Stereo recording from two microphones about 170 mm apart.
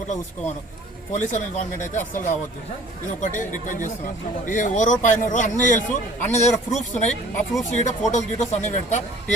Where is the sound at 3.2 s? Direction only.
50° left (ahead or behind).